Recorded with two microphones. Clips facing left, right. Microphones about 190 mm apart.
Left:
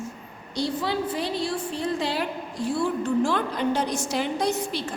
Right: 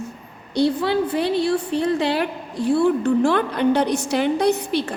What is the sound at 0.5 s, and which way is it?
A woman's voice, 60° right (ahead or behind).